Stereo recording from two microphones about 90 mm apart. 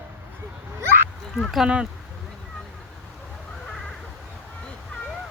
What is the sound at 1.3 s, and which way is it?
Speech, centre (ahead or behind).